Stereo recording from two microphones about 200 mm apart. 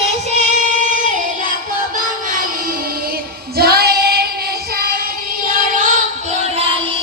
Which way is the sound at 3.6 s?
50° right (ahead or behind).